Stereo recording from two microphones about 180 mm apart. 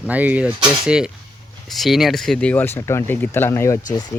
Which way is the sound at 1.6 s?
Centre (ahead or behind).